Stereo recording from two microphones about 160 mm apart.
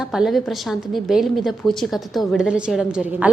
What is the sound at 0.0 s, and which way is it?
A woman's voice, 5° right (ahead or behind).